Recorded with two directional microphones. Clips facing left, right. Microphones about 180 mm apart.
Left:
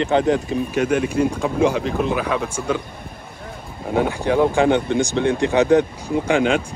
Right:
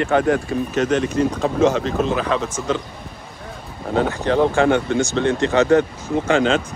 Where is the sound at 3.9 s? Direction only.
10° left (ahead or behind).